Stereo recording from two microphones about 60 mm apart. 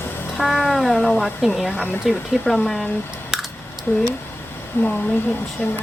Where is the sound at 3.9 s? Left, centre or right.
Left.